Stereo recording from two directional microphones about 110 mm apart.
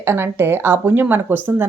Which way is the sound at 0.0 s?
20° right (ahead or behind).